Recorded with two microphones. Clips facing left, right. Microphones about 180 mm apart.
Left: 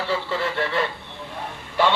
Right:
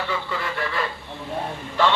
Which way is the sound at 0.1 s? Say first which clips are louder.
Left 3 dB; 30° left (ahead or behind).